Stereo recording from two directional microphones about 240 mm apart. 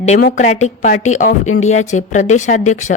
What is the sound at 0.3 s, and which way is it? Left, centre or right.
A woman's voice, left.